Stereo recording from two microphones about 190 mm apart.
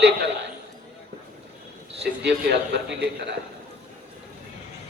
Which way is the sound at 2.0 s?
65° right (ahead or behind).